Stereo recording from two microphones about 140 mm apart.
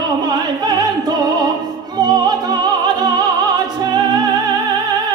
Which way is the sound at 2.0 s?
30° right (ahead or behind).